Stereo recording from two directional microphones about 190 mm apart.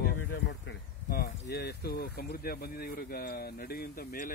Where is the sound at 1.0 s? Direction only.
50° left (ahead or behind).